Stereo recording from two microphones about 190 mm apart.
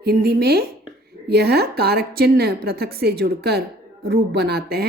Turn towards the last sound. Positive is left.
turn(degrees=-55)  # may be behind; listen again after turning